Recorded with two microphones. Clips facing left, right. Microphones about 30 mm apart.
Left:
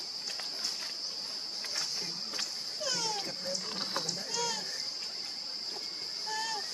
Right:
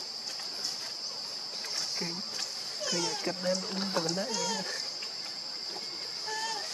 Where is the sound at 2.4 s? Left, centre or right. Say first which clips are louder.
Even; centre.